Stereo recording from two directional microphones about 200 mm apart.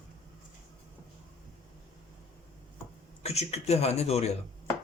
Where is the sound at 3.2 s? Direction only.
30° left (ahead or behind).